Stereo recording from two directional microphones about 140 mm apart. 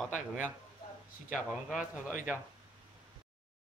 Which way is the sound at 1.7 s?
Centre (ahead or behind).